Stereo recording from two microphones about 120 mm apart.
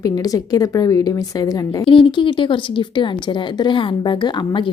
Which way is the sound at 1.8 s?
45° left (ahead or behind).